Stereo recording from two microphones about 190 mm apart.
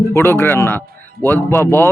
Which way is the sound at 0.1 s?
10° left (ahead or behind).